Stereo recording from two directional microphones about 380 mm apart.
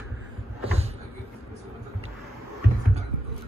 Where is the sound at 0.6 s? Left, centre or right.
Centre.